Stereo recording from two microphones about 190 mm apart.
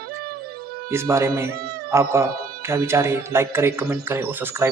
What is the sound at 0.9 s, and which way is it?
Speech, 15° right (ahead or behind).